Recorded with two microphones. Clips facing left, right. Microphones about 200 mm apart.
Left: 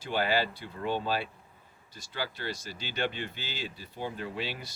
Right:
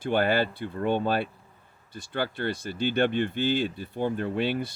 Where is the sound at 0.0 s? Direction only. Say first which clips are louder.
Right 5 dB; 55° right (ahead or behind).